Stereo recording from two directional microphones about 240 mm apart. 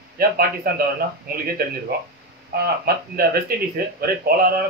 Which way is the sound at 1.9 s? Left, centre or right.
Right.